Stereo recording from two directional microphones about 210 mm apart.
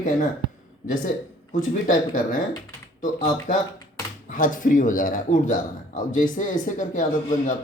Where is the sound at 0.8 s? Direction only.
40° left (ahead or behind).